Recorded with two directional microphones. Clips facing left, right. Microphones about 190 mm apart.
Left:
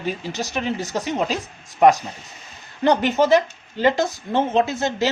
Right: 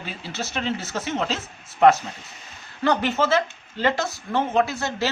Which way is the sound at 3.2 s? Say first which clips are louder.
Left 5 dB; 15° left (ahead or behind).